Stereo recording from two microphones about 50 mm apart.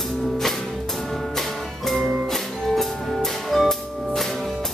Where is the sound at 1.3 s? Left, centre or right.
Centre.